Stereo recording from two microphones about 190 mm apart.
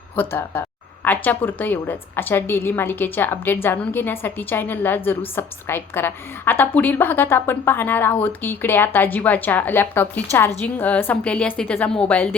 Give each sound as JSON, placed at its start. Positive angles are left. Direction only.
{"t": 0.2, "sound": "a woman's voice", "side_deg": 10}